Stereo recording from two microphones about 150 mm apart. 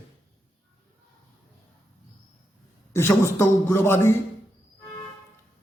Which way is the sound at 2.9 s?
15° left (ahead or behind).